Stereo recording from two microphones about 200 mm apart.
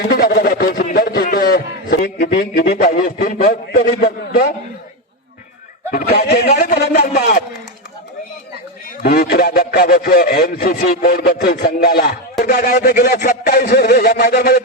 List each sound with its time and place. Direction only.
0.1 s speech: 50° left (ahead or behind)
5.9 s speech: 55° left (ahead or behind)
6.5 s speech: 40° left (ahead or behind)
9.0 s speech: 50° left (ahead or behind)